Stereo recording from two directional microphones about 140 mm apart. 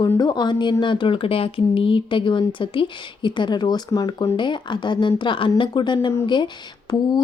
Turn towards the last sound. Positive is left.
turn(degrees=30)  # may be behind; listen again after turning